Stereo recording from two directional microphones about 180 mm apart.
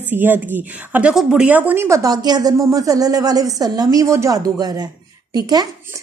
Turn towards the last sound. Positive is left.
turn(degrees=-20)  # may be behind; listen again after turning